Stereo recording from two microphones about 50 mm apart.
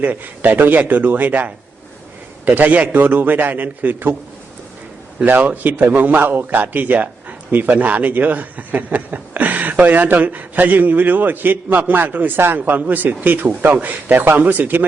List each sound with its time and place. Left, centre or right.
0.0 s a man's voice: right
5.2 s a man's voice: right